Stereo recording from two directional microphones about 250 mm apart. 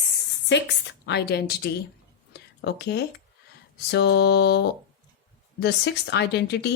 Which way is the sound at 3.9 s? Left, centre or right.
Left.